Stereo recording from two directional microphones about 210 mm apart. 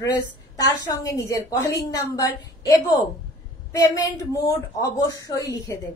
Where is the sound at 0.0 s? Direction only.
15° left (ahead or behind).